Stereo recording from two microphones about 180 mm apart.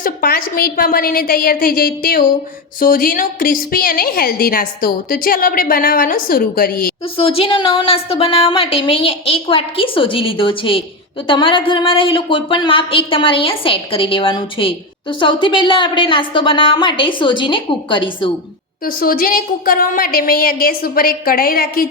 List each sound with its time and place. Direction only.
0.0 s a woman's voice: 55° left (ahead or behind)
7.2 s speech: 30° left (ahead or behind)
18.9 s a woman's voice: 55° left (ahead or behind)